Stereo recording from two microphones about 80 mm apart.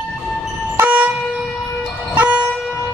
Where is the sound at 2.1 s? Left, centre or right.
Centre.